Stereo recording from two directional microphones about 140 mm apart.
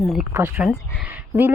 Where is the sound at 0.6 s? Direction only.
5° right (ahead or behind).